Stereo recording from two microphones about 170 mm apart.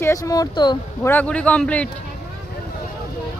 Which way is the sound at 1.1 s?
10° left (ahead or behind).